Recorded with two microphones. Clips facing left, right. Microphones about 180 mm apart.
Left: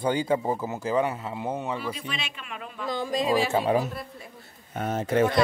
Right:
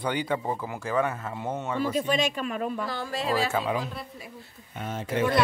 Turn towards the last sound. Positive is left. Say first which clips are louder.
# left 5 dB
turn(degrees=45)  # may be behind; listen again after turning